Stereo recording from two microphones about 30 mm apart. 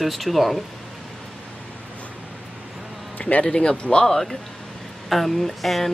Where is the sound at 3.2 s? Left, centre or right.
Left.